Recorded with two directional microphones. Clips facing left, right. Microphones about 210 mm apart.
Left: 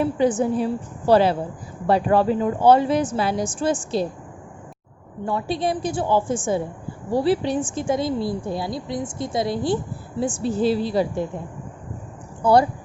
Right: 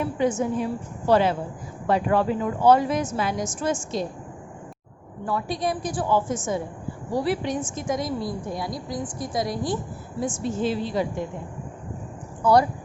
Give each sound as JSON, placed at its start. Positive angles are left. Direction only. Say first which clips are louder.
{"t": 0.0, "sound": "a woman's voice", "louder": "left 4 dB", "side_deg": 35}
{"t": 5.2, "sound": "a woman's voice", "louder": "left 3 dB", "side_deg": 25}
{"t": 12.4, "sound": "speech", "louder": "left 2 dB", "side_deg": 30}